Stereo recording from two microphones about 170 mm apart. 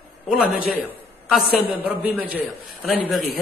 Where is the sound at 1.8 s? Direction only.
10° right (ahead or behind).